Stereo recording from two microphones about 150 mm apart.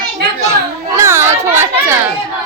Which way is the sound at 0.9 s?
20° right (ahead or behind).